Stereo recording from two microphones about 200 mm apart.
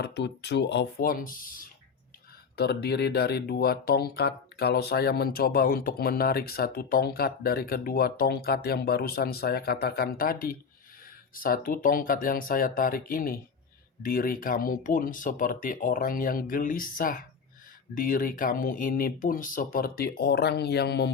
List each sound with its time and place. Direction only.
0.0 s speech: 60° left (ahead or behind)
2.6 s speech: 55° left (ahead or behind)